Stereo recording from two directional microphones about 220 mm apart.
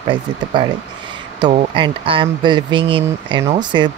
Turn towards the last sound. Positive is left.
turn(degrees=-20)  # may be behind; listen again after turning